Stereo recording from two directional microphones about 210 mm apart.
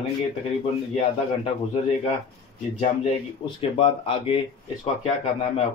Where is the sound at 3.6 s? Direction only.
25° left (ahead or behind).